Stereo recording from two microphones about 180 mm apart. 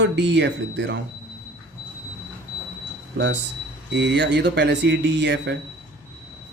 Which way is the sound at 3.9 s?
75° right (ahead or behind).